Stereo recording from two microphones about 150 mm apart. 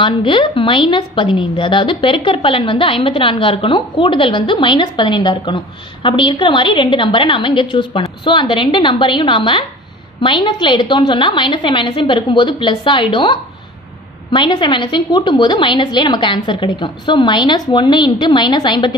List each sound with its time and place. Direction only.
0.0 s a woman's voice: 35° left (ahead or behind)